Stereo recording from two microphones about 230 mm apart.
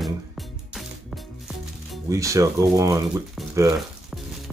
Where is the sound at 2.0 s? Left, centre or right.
Centre.